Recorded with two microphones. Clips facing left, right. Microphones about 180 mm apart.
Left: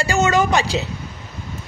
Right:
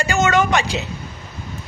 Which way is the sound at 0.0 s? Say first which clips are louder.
Even; 35° left (ahead or behind).